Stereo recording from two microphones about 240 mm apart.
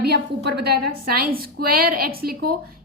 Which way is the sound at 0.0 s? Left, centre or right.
Right.